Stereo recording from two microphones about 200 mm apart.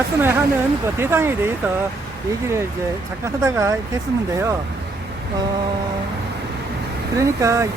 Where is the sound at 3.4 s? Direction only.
15° right (ahead or behind).